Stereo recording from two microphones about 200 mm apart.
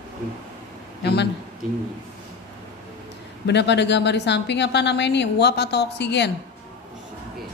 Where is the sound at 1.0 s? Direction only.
55° left (ahead or behind).